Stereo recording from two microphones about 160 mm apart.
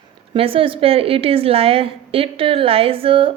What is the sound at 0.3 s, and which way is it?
Speech, 35° right (ahead or behind).